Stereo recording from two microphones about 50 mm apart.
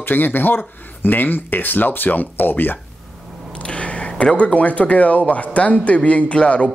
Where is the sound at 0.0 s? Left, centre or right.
Left.